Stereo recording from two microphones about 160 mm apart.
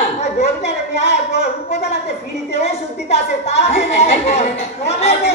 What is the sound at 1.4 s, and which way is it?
A woman's voice, 45° left (ahead or behind).